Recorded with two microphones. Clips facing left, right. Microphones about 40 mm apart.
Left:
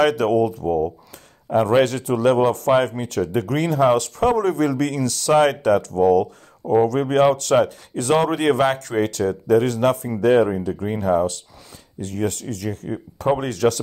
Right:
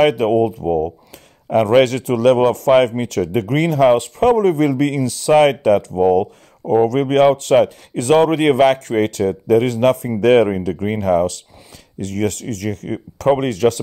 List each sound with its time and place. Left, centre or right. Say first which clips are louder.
0.0 s speech: right 3 dB; right
3.9 s speech: right 4 dB; right
10.2 s speech: right 4 dB; right
10.7 s speech: right 4 dB; right
11.0 s speech: right 3 dB; right
13.3 s speech: right 4 dB; right